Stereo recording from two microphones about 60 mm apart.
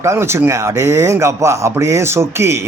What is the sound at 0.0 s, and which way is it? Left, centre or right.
Speech, right.